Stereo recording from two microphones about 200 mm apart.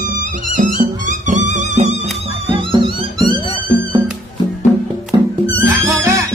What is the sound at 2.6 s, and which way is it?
Music, 25° right (ahead or behind).